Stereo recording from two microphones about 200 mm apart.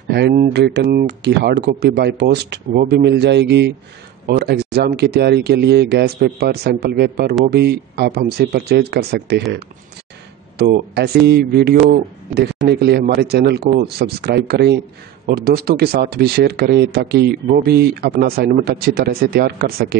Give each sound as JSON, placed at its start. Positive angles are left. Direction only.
{"t": 0.1, "sound": "a man's voice", "side_deg": -50}